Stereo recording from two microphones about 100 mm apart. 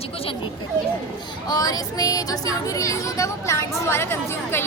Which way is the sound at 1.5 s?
40° left (ahead or behind).